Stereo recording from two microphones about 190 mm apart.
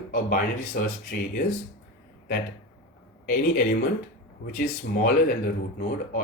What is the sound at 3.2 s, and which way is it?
Speech, 50° left (ahead or behind).